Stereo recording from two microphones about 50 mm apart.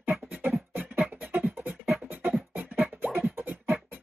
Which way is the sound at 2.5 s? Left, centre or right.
Right.